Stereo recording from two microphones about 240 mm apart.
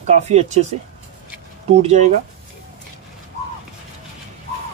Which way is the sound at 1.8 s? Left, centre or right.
Right.